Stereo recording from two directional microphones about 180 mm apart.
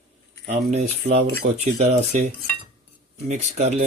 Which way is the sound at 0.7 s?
35° right (ahead or behind).